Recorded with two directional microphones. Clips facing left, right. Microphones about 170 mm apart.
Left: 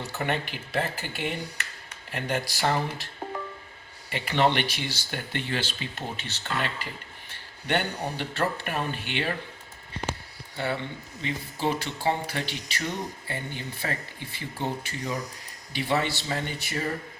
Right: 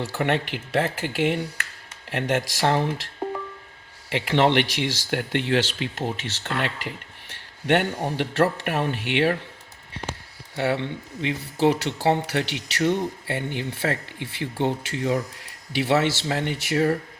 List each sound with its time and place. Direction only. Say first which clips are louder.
0.0 s speech: right 5 dB; 85° right
4.1 s speech: right 4 dB; 80° right
10.6 s speech: right 6 dB; 75° right (ahead or behind)
15.7 s speech: right 6 dB; 80° right